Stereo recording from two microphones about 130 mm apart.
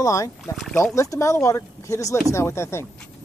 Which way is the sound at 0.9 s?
25° left (ahead or behind).